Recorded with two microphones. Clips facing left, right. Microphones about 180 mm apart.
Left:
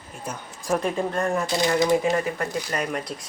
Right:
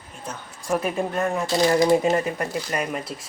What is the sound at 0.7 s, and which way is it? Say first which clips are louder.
Speech: even; 10° right (ahead or behind).